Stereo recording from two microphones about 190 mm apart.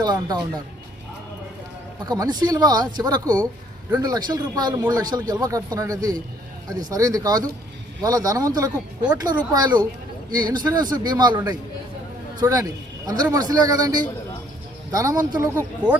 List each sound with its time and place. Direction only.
0.0 s speech: 20° right (ahead or behind)
2.0 s a man's voice: 20° right (ahead or behind)
14.9 s speech: 20° right (ahead or behind)